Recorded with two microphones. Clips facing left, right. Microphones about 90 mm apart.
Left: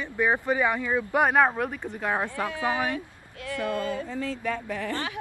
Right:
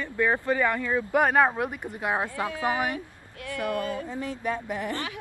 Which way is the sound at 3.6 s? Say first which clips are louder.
Even; 25° left (ahead or behind).